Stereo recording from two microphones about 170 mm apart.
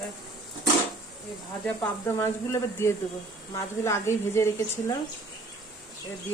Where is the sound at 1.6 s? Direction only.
10° left (ahead or behind).